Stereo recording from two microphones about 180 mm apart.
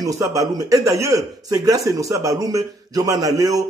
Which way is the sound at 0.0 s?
20° right (ahead or behind).